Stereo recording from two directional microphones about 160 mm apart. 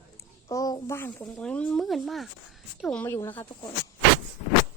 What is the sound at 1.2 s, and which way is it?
Speech, 5° left (ahead or behind).